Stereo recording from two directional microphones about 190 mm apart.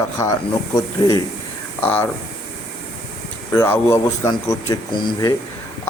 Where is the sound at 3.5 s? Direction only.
15° left (ahead or behind).